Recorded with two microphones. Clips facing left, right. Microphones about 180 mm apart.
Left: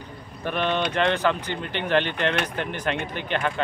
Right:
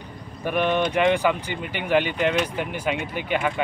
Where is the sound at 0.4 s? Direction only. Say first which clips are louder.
Right 3 dB; 10° right (ahead or behind).